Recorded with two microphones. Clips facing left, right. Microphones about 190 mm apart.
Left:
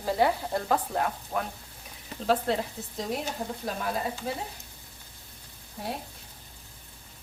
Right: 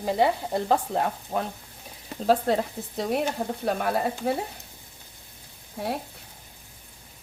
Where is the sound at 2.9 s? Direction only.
60° right (ahead or behind).